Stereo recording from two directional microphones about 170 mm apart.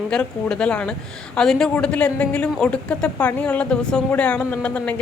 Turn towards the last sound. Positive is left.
turn(degrees=10)  # may be behind; listen again after turning